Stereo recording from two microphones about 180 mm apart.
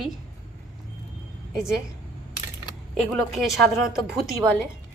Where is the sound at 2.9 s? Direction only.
Centre (ahead or behind).